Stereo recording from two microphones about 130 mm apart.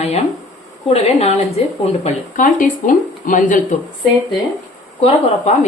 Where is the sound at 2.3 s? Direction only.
90° left.